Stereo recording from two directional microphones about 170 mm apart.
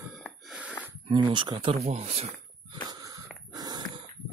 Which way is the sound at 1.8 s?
40° right (ahead or behind).